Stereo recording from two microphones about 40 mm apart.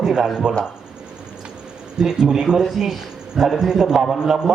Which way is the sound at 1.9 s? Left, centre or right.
Centre.